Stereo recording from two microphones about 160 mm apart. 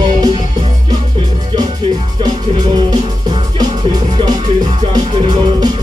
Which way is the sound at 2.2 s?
25° right (ahead or behind).